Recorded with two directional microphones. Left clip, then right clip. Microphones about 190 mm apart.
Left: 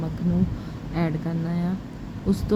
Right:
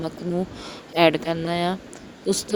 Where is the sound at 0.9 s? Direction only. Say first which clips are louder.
Right 11 dB; 45° right (ahead or behind).